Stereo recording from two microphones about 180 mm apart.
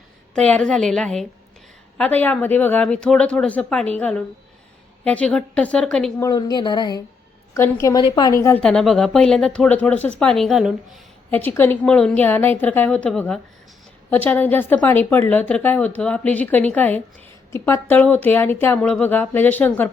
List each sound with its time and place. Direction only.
0.3 s a woman's voice: 5° left (ahead or behind)
6.2 s a woman's voice: 25° left (ahead or behind)
8.6 s speech: centre (ahead or behind)
11.3 s a woman's voice: 10° left (ahead or behind)